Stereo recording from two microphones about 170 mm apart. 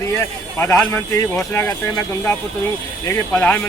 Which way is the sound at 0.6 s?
15° left (ahead or behind).